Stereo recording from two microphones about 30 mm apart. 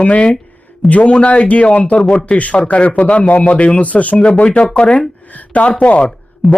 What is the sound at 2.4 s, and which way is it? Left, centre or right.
Speech, left.